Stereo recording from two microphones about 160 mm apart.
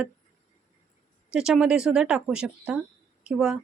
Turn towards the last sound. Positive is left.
turn(degrees=-5)  # may be behind; listen again after turning